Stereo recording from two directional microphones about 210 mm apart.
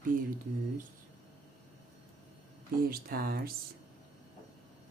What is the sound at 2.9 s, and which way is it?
Speech, 45° right (ahead or behind).